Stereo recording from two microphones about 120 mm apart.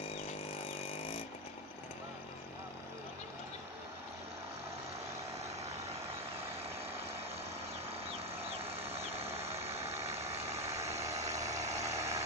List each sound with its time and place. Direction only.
8.5 s vehicle: 55° right (ahead or behind)
11.8 s vehicle: 25° right (ahead or behind)